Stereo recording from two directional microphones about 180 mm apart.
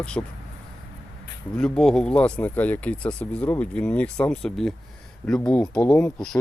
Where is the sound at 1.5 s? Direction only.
5° left (ahead or behind).